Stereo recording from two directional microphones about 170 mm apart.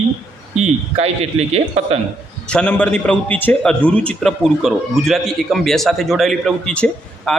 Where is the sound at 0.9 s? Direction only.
40° right (ahead or behind).